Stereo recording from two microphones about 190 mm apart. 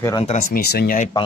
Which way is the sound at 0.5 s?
50° left (ahead or behind).